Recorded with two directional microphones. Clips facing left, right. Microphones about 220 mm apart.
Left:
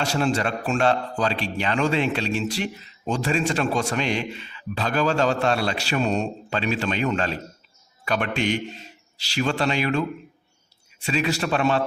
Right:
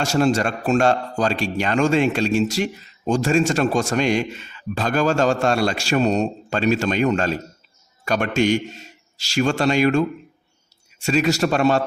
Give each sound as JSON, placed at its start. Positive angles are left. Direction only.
{"t": 0.0, "sound": "a man's voice", "side_deg": -40}
{"t": 11.0, "sound": "a man's voice", "side_deg": -45}